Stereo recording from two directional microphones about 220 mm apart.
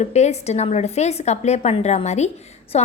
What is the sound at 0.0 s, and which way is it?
A woman's voice, 30° left (ahead or behind).